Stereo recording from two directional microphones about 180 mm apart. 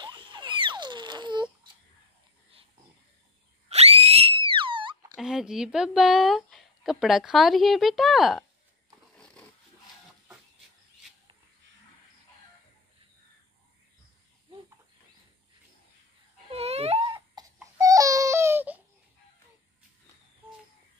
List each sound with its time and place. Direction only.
0.0 s a sound: 25° right (ahead or behind)
3.6 s screaming: 35° right (ahead or behind)
5.1 s speech: centre (ahead or behind)
9.2 s dog: 5° left (ahead or behind)
16.4 s baby cry: 35° right (ahead or behind)
17.6 s baby cry: 20° right (ahead or behind)